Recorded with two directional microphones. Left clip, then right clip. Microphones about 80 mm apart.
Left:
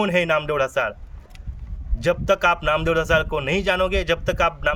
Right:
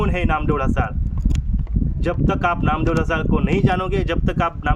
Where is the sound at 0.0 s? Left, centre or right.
Right.